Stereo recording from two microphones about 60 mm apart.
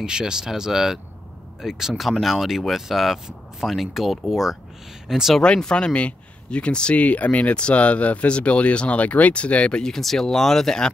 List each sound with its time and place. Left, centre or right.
0.0 s speech: centre
5.3 s speech: centre